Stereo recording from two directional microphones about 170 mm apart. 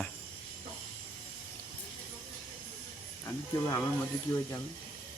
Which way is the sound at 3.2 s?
15° left (ahead or behind).